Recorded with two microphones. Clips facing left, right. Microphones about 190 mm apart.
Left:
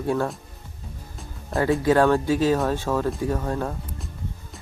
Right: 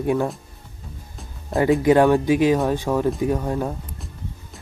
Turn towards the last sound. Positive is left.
turn(degrees=-15)  # may be behind; listen again after turning